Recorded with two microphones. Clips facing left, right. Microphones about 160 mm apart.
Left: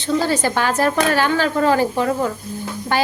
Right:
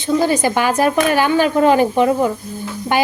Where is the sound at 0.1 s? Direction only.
15° right (ahead or behind).